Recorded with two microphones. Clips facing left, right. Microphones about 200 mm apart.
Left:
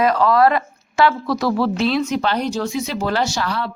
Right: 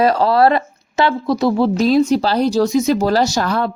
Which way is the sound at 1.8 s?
40° right (ahead or behind).